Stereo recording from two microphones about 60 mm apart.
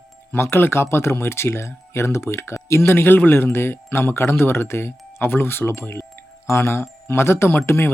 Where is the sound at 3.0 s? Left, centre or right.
Left.